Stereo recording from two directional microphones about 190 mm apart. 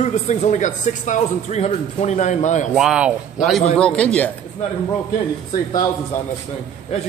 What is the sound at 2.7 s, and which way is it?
Speech, 5° right (ahead or behind).